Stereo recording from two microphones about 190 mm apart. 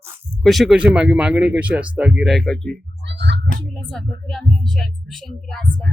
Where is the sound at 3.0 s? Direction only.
65° right (ahead or behind).